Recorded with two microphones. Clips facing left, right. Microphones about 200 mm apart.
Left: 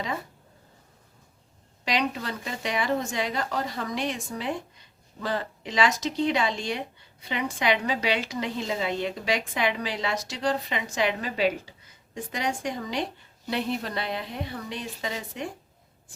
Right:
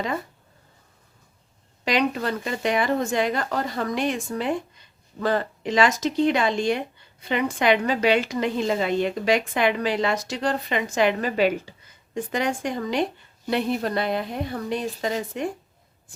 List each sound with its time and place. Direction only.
1.8 s a woman's voice: 50° right (ahead or behind)